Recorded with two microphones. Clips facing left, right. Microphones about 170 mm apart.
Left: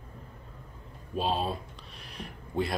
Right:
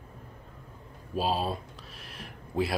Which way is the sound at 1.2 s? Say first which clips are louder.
Right 1 dB; 5° right (ahead or behind).